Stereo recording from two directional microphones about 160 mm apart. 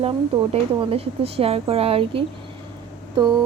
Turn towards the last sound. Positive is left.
turn(degrees=-30)  # may be behind; listen again after turning